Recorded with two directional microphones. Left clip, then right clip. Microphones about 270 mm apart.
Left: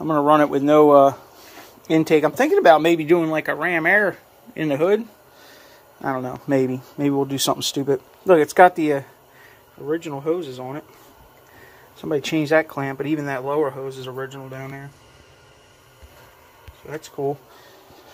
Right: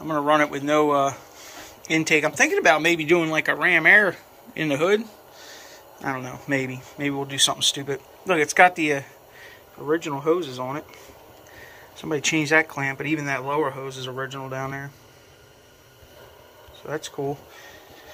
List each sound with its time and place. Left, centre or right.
0.0 s speech: left
9.8 s speech: centre
12.0 s speech: centre
16.9 s speech: centre